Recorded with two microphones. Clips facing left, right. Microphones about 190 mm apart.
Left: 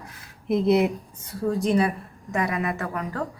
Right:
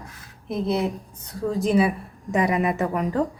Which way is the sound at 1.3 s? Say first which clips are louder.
Right 1 dB; centre (ahead or behind).